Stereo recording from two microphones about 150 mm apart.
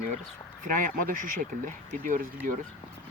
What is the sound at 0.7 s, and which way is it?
Speech, 65° right (ahead or behind).